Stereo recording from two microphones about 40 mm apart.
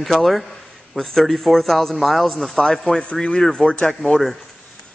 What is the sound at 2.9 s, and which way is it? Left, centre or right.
Speech, left.